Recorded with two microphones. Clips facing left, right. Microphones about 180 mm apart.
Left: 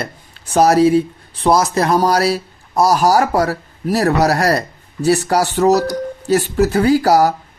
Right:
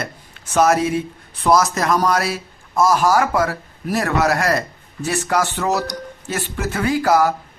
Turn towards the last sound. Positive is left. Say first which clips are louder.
# left 4 dB
turn(degrees=40)  # may be behind; listen again after turning